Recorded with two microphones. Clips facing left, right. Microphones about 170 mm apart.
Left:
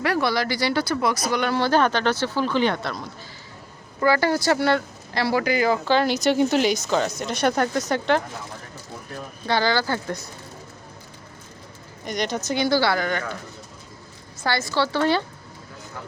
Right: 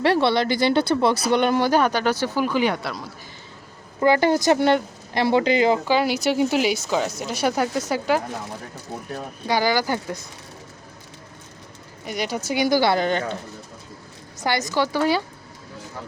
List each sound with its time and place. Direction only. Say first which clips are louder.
0.0 s speech: right 4 dB; 25° right (ahead or behind); by 3.1 s 5° right (ahead or behind)
4.0 s speech: right 3 dB; 20° right (ahead or behind)
5.9 s speech: left 1 dB; 10° right (ahead or behind)
9.5 s speech: right 1 dB; 15° right (ahead or behind)
12.0 s speech: even; 5° right (ahead or behind); by 13.3 s 20° right (ahead or behind)
14.4 s speech: right 1 dB; 15° right (ahead or behind)